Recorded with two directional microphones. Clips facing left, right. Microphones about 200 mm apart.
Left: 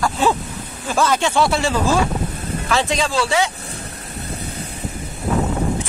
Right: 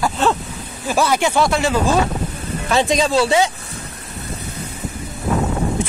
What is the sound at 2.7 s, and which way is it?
Speech, 15° right (ahead or behind).